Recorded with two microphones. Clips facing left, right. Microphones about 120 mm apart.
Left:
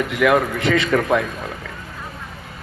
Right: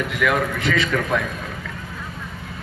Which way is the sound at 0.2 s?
20° left (ahead or behind).